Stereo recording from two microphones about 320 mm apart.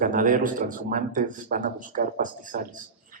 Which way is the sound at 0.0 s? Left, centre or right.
Right.